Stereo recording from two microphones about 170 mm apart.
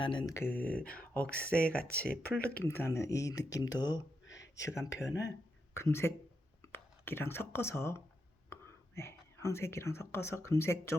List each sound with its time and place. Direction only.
0.0 s speech: 30° left (ahead or behind)
0.3 s speech: 10° left (ahead or behind)